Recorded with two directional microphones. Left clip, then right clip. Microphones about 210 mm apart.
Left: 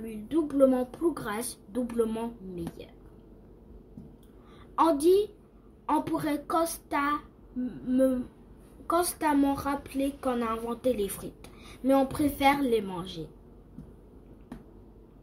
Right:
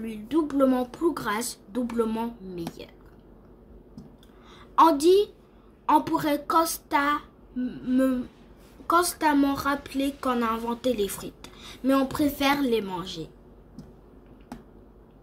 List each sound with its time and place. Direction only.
0.0 s a woman's voice: 10° right (ahead or behind)
4.7 s a woman's voice: 5° right (ahead or behind)